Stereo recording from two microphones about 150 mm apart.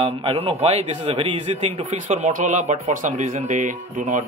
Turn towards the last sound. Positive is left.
turn(degrees=-60)  # may be behind; listen again after turning